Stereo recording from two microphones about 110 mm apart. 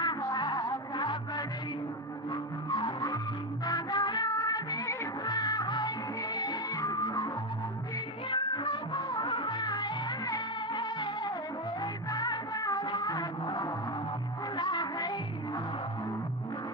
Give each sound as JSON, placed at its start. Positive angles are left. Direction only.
{"t": 0.0, "sound": "music", "side_deg": 40}
{"t": 3.6, "sound": "music of bollywood", "side_deg": 40}
{"t": 8.3, "sound": "music of bollywood", "side_deg": 50}
{"t": 14.5, "sound": "music", "side_deg": 45}